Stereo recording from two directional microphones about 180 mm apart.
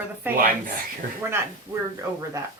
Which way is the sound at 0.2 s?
10° right (ahead or behind).